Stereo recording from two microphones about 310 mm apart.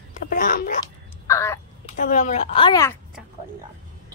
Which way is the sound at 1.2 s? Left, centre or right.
Centre.